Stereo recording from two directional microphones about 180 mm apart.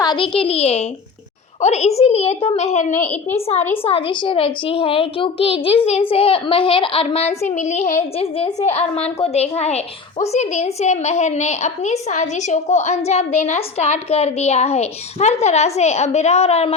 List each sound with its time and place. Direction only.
0.0 s a child's voice: 25° left (ahead or behind)
2.9 s a woman's voice: 10° left (ahead or behind)
3.8 s a woman's voice: 30° left (ahead or behind)